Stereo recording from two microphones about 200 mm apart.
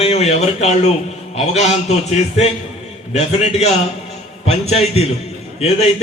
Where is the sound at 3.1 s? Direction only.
35° left (ahead or behind).